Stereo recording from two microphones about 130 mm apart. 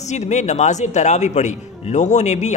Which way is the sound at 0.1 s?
65° left (ahead or behind).